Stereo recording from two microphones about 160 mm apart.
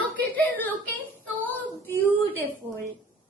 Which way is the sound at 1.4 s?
10° left (ahead or behind).